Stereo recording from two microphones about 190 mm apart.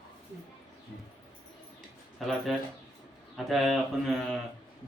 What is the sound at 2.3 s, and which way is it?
Mantra, centre (ahead or behind).